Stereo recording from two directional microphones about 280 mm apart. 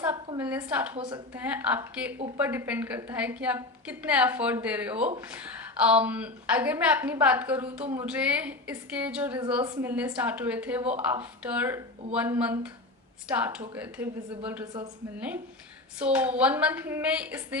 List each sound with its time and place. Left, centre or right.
0.0 s a sound: centre
0.9 s a woman's voice: centre
1.4 s a woman's voice: centre